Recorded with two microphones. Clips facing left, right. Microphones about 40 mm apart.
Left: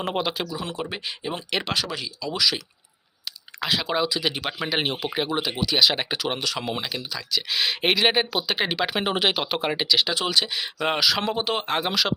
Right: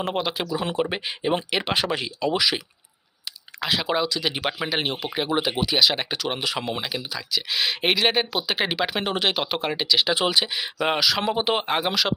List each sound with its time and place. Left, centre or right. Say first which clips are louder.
0.0 s speech: even; centre
0.4 s speech: right 5 dB; right; by 1.7 s centre
1.7 s speech: right 3 dB; right
2.3 s speech: even; centre
3.6 s speech: right 1 dB; centre
4.7 s speech: left 1 dB; centre
5.3 s speech: right 2 dB; centre
5.7 s speech: left 2 dB; centre
10.2 s speech: right 2 dB; centre